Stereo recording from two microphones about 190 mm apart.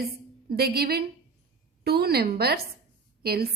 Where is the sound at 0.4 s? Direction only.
55° right (ahead or behind).